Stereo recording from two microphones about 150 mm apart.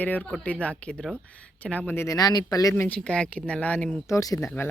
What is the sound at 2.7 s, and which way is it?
Speech, 10° left (ahead or behind).